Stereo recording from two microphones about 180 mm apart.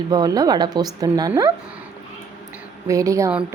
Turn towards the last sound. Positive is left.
turn(degrees=-15)  # may be behind; listen again after turning